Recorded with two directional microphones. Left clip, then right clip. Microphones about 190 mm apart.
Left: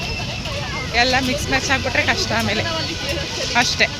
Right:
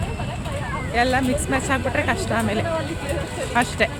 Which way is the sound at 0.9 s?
15° right (ahead or behind).